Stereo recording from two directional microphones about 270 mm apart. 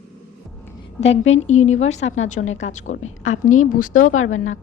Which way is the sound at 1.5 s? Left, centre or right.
Left.